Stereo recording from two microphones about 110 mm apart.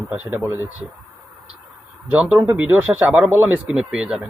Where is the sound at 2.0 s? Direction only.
15° right (ahead or behind).